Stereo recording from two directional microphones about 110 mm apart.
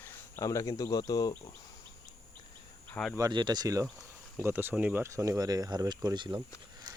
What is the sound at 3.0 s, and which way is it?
Speech, 15° left (ahead or behind).